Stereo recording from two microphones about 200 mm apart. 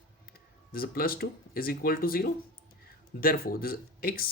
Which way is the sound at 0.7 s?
50° left (ahead or behind).